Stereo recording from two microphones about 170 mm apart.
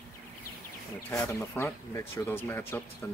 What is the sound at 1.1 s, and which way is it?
Speech, 20° left (ahead or behind).